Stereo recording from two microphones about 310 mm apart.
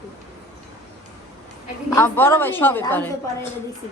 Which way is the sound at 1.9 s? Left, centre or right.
Centre.